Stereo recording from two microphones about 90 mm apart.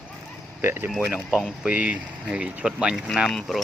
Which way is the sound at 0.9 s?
10° right (ahead or behind).